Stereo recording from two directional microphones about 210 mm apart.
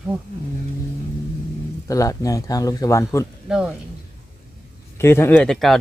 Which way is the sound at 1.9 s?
15° left (ahead or behind).